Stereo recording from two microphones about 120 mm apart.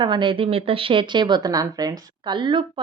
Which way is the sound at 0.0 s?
40° right (ahead or behind).